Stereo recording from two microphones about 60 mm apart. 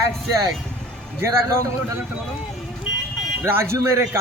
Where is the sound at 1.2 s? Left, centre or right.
Right.